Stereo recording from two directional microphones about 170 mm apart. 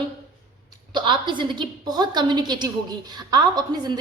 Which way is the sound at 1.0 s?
25° right (ahead or behind).